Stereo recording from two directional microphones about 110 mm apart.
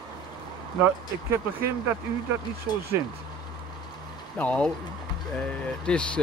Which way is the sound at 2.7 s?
40° left (ahead or behind).